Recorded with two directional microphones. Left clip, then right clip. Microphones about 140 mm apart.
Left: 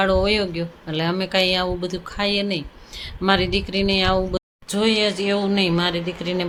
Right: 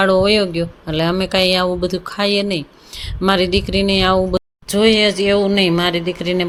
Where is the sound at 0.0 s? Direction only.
35° right (ahead or behind).